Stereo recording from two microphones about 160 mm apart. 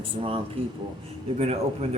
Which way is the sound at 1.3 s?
40° right (ahead or behind).